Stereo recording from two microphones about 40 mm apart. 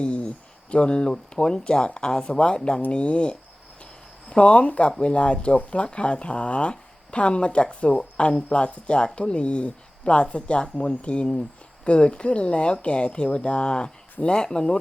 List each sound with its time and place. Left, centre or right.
0.0 s speech: left